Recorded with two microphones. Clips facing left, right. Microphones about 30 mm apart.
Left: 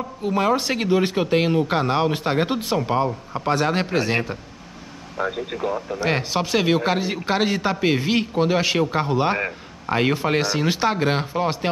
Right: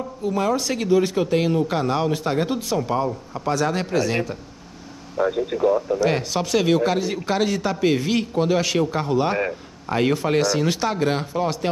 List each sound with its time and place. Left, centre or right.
0.2 s a man's voice: left